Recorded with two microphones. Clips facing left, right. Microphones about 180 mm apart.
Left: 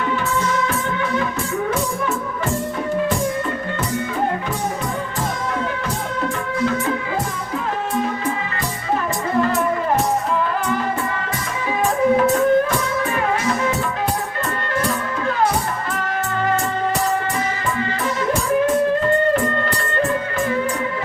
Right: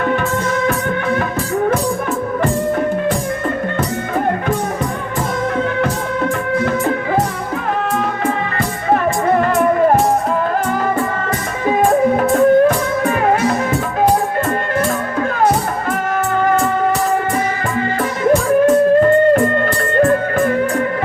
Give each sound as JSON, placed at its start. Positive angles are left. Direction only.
{"t": 0.1, "sound": "music", "side_deg": -55}
{"t": 8.9, "sound": "music", "side_deg": -55}
{"t": 11.8, "sound": "music", "side_deg": -50}
{"t": 20.0, "sound": "music", "side_deg": -55}